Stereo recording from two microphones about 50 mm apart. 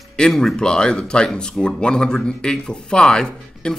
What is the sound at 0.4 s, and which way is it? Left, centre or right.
Speech, centre.